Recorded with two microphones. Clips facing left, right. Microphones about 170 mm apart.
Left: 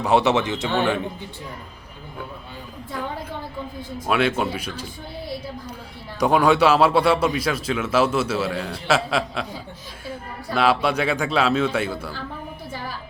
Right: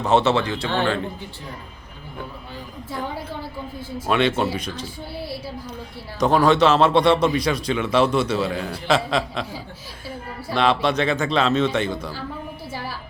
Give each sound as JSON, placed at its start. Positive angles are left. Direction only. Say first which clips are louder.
{"t": 0.0, "sound": "a man's voice", "louder": "even", "side_deg": 15}
{"t": 4.0, "sound": "a man's voice", "louder": "right 1 dB", "side_deg": 5}
{"t": 6.1, "sound": "a man's voice", "louder": "right 1 dB", "side_deg": 10}
{"t": 10.5, "sound": "a man's voice", "louder": "even", "side_deg": 5}